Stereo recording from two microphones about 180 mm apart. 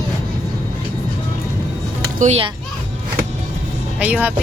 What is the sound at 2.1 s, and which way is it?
Speech, 40° right (ahead or behind).